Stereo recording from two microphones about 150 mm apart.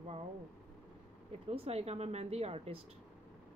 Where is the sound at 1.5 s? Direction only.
40° right (ahead or behind).